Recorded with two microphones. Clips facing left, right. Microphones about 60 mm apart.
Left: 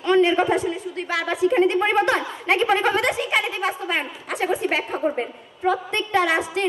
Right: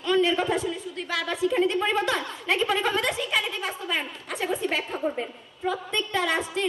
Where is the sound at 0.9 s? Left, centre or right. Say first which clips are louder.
Left 4 dB; left.